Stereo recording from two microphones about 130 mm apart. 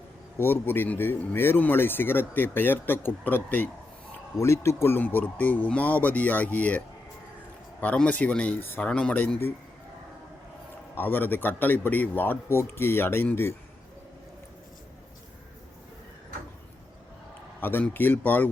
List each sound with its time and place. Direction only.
0.3 s speech: 15° left (ahead or behind)
10.9 s speech: 15° left (ahead or behind)
17.6 s speech: 15° left (ahead or behind)